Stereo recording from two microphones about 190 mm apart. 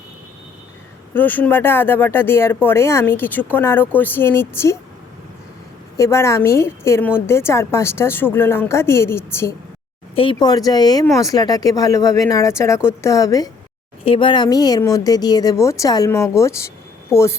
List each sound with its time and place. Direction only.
1.1 s speech: 10° left (ahead or behind)
6.0 s speech: 15° left (ahead or behind)
10.2 s speech: 25° left (ahead or behind)